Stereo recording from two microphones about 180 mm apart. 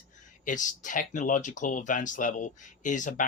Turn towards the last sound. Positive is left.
turn(degrees=45)  # may be behind; listen again after turning